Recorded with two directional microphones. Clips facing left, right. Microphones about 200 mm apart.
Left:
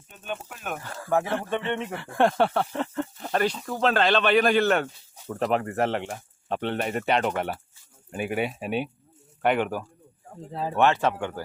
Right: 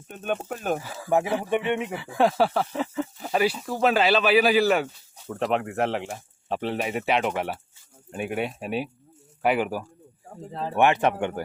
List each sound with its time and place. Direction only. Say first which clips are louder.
0.1 s speech: right 7 dB; 55° right (ahead or behind); by 0.8 s 40° right (ahead or behind)
0.8 s speech: left 3 dB; 5° right (ahead or behind)
10.5 s speech: left 1 dB; 5° left (ahead or behind)
10.8 s speech: right 2 dB; 15° right (ahead or behind)